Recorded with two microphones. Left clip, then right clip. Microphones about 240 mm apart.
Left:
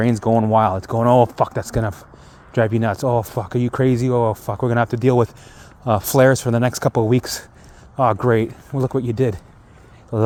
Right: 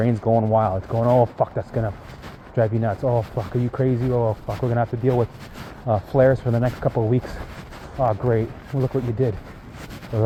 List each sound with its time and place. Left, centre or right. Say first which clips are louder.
0.0 s speech: left 2 dB; left